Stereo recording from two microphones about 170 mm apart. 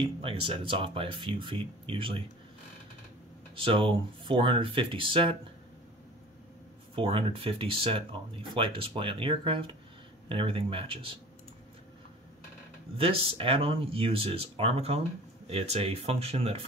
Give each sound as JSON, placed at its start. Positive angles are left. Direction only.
{"t": 0.0, "sound": "speech", "side_deg": -30}
{"t": 3.5, "sound": "speech", "side_deg": -30}
{"t": 7.0, "sound": "speech", "side_deg": -30}
{"t": 12.9, "sound": "speech", "side_deg": -35}